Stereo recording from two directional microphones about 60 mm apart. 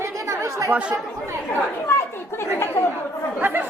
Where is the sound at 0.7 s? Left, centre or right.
Right.